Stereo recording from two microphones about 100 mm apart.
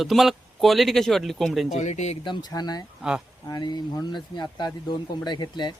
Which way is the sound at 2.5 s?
40° left (ahead or behind).